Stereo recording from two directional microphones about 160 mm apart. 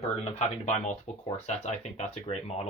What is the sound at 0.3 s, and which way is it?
Speech, 45° left (ahead or behind).